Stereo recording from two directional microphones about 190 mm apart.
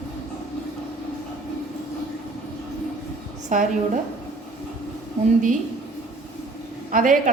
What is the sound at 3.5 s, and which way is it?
Speech, 40° right (ahead or behind).